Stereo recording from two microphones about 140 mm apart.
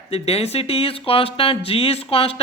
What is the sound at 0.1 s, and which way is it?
Speech, 45° left (ahead or behind).